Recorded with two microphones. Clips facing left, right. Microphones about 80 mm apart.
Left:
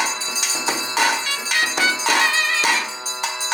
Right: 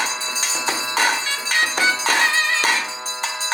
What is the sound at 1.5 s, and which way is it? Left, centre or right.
Music, right.